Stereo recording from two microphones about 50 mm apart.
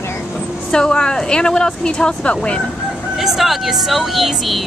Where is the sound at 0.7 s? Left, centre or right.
Centre.